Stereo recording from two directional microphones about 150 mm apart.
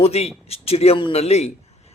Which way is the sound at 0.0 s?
45° left (ahead or behind).